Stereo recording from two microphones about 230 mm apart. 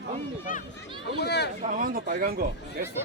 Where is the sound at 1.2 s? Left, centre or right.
Left.